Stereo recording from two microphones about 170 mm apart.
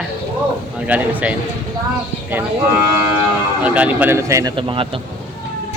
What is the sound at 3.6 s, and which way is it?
Speech, 10° right (ahead or behind).